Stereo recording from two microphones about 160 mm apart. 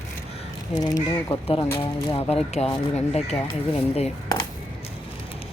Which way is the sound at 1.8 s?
35° left (ahead or behind).